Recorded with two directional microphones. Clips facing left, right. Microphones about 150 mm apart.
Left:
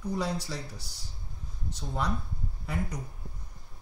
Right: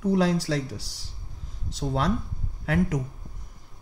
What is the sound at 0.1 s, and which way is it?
Speech, 90° right.